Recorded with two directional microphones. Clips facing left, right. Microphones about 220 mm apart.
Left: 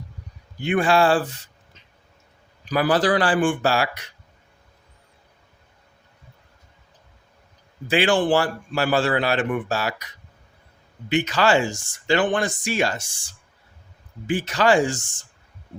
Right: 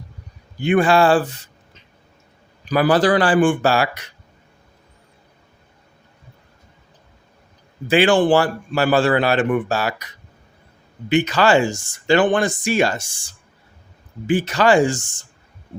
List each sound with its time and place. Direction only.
0.6 s a man's voice: 55° right (ahead or behind)
2.6 s a man's voice: 60° right (ahead or behind)
7.9 s a man's voice: 55° right (ahead or behind)
11.1 s a man's voice: 55° right (ahead or behind)
14.3 s a man's voice: 55° right (ahead or behind)